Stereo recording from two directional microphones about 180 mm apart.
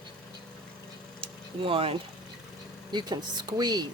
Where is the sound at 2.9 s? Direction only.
25° right (ahead or behind).